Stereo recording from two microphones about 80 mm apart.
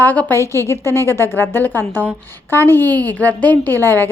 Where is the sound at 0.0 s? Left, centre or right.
Left.